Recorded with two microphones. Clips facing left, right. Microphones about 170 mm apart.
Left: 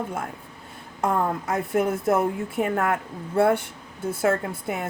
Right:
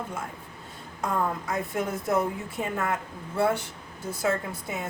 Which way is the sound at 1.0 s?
55° left (ahead or behind).